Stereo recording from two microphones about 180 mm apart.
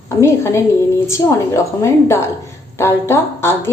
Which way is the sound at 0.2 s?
15° left (ahead or behind).